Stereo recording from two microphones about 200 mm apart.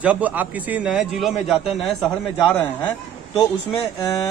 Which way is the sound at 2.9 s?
15° left (ahead or behind).